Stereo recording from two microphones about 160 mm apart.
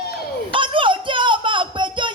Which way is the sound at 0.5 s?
30° right (ahead or behind).